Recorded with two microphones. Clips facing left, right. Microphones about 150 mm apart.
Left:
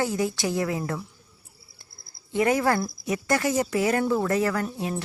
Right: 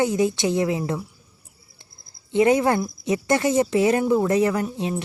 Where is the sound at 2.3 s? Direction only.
20° right (ahead or behind).